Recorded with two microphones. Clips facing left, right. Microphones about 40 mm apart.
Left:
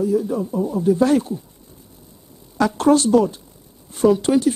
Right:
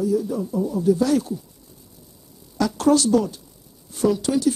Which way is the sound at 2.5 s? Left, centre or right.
Left.